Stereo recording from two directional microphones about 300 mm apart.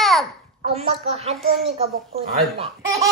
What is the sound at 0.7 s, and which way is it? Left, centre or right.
Speech, right.